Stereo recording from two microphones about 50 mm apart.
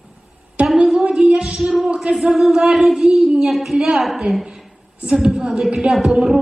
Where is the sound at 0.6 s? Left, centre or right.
Right.